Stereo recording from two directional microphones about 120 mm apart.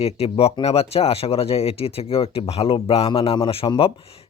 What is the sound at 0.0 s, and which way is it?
Speech, 55° left (ahead or behind).